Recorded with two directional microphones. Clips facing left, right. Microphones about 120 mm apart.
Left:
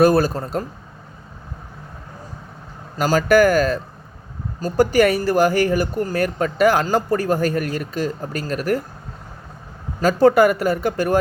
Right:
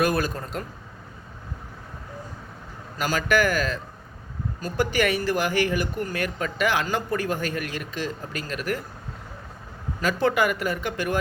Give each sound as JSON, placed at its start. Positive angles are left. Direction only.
{"t": 0.0, "sound": "speech", "side_deg": 35}
{"t": 3.0, "sound": "speech", "side_deg": 40}
{"t": 10.0, "sound": "speech", "side_deg": 40}